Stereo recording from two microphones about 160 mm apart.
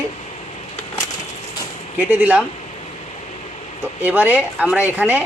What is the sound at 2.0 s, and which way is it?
Speech, 10° right (ahead or behind).